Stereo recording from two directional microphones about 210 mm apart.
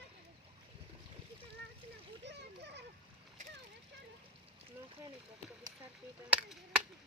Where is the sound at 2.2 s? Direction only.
55° right (ahead or behind).